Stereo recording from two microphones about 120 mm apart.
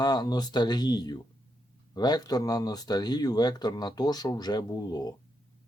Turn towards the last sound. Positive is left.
turn(degrees=35)  # may be behind; listen again after turning